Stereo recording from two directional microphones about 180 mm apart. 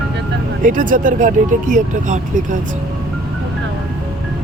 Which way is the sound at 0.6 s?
45° right (ahead or behind).